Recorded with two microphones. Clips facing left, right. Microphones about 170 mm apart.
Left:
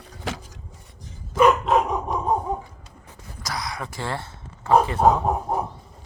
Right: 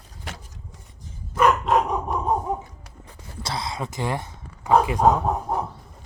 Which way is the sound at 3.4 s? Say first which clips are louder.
Right 2 dB; 25° right (ahead or behind).